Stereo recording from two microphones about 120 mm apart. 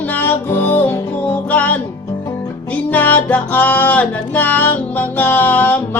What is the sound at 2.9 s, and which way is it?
Music, 15° left (ahead or behind).